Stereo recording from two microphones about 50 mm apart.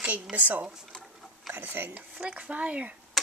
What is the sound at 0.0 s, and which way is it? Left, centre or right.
Speech, right.